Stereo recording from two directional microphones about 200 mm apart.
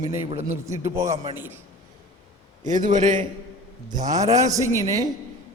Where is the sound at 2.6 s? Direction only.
40° right (ahead or behind).